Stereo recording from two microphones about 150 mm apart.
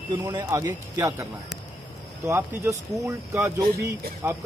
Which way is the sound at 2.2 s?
20° right (ahead or behind).